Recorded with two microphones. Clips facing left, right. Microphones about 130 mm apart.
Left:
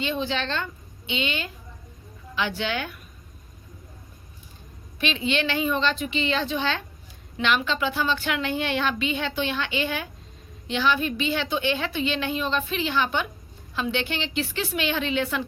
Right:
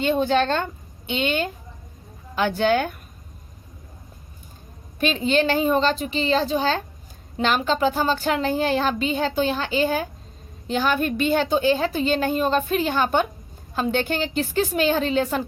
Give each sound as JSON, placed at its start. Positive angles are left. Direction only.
{"t": 0.0, "sound": "a woman's voice", "side_deg": -50}
{"t": 4.9, "sound": "a woman's voice", "side_deg": -45}